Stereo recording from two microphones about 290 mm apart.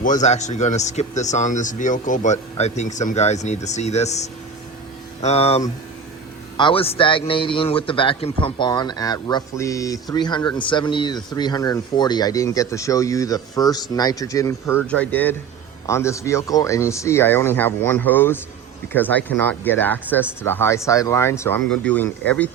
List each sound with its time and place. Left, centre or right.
0.0 s a man's voice: left; by 22.1 s centre